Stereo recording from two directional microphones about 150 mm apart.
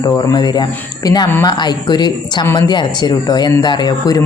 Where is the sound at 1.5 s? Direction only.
30° left (ahead or behind).